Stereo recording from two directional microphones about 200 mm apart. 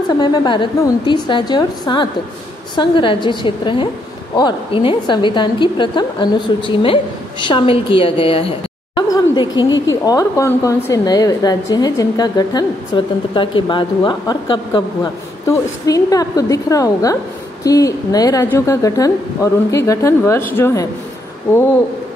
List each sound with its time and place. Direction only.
0.2 s a woman's voice: 20° left (ahead or behind)
9.1 s a sound: 20° left (ahead or behind)
9.7 s a woman's voice: 70° left (ahead or behind)
10.0 s a woman's voice: 15° left (ahead or behind)